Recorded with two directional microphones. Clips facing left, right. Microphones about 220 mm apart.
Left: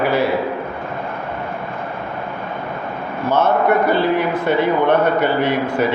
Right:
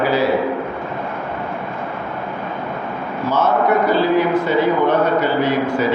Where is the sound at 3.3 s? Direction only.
55° left (ahead or behind).